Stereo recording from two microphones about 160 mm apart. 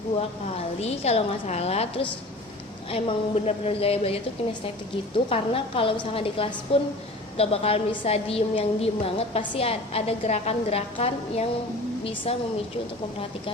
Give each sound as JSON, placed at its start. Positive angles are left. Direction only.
{"t": 0.8, "sound": "a woman's voice", "side_deg": 40}
{"t": 5.3, "sound": "a woman's voice", "side_deg": 35}